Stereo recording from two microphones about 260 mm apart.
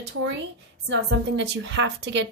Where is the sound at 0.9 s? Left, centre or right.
Right.